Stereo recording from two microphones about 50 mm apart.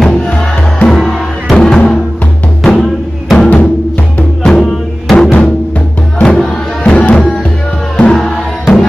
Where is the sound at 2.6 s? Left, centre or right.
Centre.